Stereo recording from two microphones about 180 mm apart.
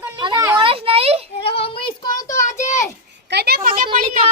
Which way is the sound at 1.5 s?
30° left (ahead or behind).